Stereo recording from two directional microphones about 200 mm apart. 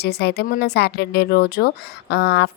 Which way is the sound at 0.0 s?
55° left (ahead or behind).